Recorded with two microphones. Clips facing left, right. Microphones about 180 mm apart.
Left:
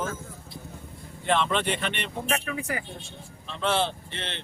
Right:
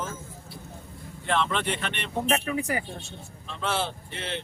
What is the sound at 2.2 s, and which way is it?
Speech, 30° right (ahead or behind).